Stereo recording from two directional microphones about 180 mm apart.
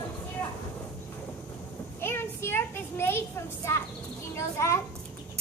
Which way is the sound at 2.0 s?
15° left (ahead or behind).